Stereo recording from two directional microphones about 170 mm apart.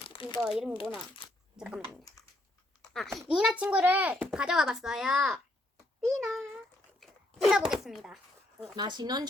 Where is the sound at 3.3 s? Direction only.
5° right (ahead or behind).